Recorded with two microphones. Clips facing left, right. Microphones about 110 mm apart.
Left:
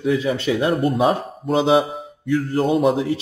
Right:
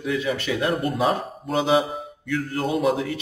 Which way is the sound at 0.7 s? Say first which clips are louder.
Left 5 dB; centre (ahead or behind).